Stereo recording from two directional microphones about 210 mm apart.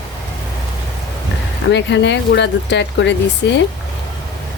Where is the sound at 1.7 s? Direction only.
55° left (ahead or behind).